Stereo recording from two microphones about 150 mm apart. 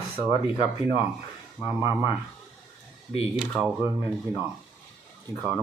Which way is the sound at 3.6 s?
5° right (ahead or behind).